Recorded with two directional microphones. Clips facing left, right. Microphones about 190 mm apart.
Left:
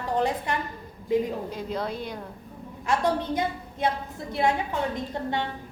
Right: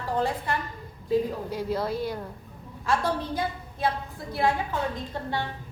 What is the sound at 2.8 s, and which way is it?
A woman's voice, 20° left (ahead or behind).